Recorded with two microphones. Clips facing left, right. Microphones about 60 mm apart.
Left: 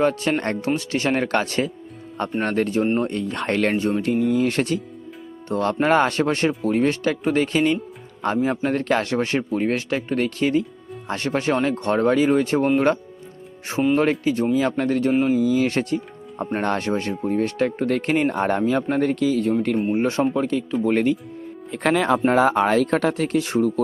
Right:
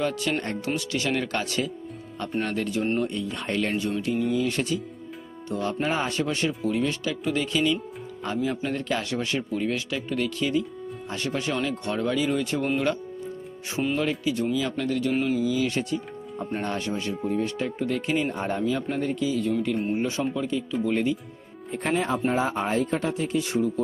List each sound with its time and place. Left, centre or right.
0.0 s speech: left
3.8 s speech: left
21.7 s speech: left
22.3 s speech: left